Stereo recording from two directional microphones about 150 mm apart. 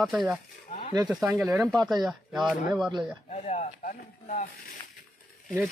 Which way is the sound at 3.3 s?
50° left (ahead or behind).